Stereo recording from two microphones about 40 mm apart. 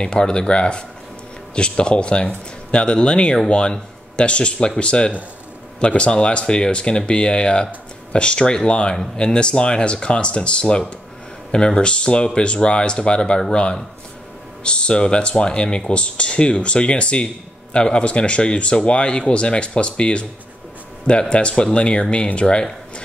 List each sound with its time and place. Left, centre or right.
0.0 s speech: left
8.9 s speech: centre